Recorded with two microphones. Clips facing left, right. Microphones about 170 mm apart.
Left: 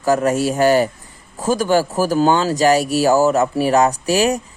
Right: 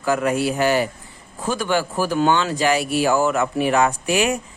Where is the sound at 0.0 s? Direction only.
40° left (ahead or behind).